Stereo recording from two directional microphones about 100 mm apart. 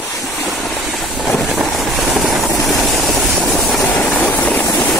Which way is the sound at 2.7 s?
Centre (ahead or behind).